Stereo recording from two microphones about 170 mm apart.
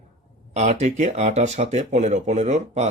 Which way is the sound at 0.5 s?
45° right (ahead or behind).